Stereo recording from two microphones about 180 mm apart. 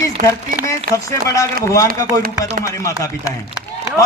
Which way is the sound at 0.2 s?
50° right (ahead or behind).